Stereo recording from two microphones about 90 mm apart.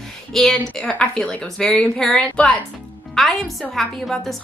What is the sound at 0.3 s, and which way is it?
A woman's voice, 5° left (ahead or behind).